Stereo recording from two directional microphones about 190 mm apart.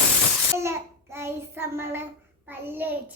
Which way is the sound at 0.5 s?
15° right (ahead or behind).